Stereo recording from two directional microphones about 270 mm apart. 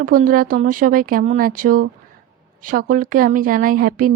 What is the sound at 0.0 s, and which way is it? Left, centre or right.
Speech, right.